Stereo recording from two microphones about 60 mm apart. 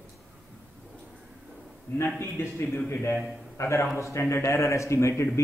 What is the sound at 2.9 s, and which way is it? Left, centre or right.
A man's voice, left.